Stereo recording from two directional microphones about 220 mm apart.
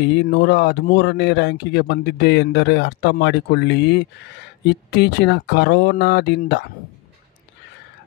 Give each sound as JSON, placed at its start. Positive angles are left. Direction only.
{"t": 0.0, "sound": "speech", "side_deg": 50}